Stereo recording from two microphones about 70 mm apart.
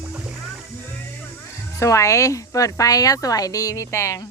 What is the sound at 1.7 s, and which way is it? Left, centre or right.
Speech, left.